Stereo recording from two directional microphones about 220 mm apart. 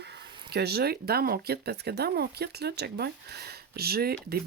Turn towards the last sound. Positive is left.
turn(degrees=-45)  # may be behind; listen again after turning